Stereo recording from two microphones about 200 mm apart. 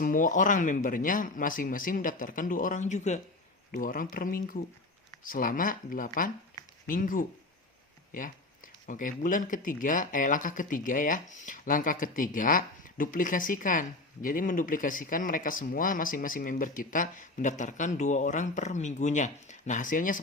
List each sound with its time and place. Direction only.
0.0 s speech: 40° left (ahead or behind)